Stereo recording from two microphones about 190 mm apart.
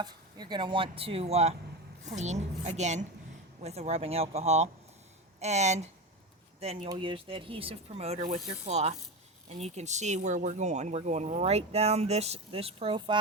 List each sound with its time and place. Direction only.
0.0 s speech: 20° right (ahead or behind)